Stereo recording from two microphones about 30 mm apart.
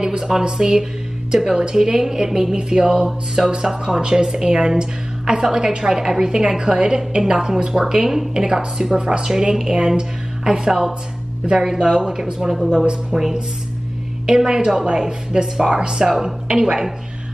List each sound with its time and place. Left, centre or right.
0.0 s speech: right
5.9 s speech: centre
7.9 s speech: centre
8.9 s speech: right
9.2 s speech: right
14.2 s speech: right